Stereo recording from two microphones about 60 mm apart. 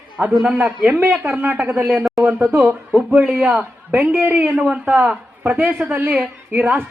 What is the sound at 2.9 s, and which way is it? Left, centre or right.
Speech, centre.